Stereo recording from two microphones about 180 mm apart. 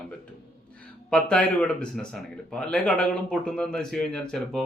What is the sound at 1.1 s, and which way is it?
A man's voice, 5° left (ahead or behind).